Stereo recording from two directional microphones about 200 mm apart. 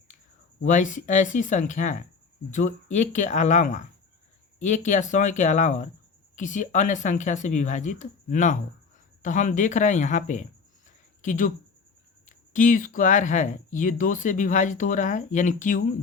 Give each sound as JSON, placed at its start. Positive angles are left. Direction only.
{"t": 0.6, "sound": "speech", "side_deg": 40}